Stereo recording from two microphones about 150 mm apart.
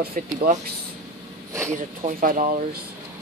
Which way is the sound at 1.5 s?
20° right (ahead or behind).